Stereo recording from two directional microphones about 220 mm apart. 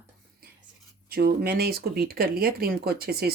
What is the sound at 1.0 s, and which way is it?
Speech, 45° right (ahead or behind).